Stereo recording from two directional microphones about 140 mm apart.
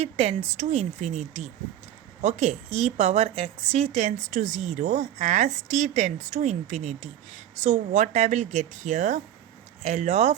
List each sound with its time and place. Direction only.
0.0 s a woman's voice: 50° right (ahead or behind)